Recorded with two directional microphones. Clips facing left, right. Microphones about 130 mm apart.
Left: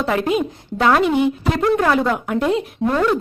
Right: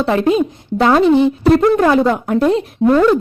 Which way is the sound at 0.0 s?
30° right (ahead or behind).